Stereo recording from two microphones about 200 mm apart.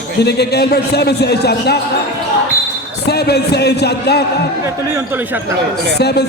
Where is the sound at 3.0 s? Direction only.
55° left (ahead or behind).